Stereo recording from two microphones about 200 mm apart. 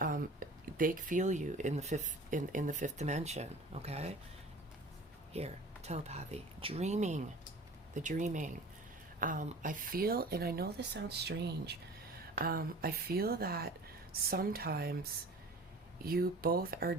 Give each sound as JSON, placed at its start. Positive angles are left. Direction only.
{"t": 0.0, "sound": "speech", "side_deg": -45}
{"t": 5.3, "sound": "speech", "side_deg": -30}
{"t": 16.0, "sound": "speech", "side_deg": -50}